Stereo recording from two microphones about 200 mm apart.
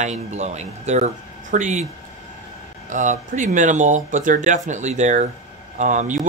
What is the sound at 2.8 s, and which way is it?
Speech, 40° right (ahead or behind).